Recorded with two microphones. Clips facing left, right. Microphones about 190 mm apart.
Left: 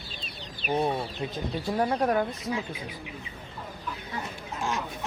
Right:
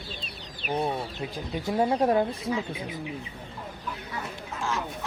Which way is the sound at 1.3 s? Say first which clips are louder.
Right 2 dB; 15° right (ahead or behind).